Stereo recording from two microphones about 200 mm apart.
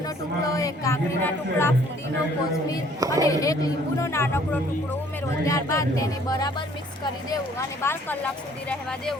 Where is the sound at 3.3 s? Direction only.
15° left (ahead or behind).